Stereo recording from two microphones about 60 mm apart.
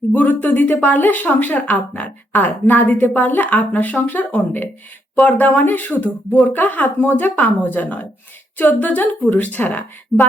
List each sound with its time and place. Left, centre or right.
0.1 s speech: left